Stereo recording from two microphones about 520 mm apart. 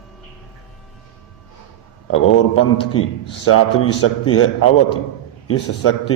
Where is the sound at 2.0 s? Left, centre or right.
Left.